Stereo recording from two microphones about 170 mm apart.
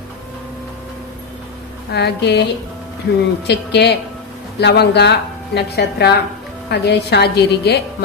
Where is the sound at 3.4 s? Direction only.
80° left.